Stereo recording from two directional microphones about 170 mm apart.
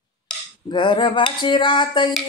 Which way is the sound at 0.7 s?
25° left (ahead or behind).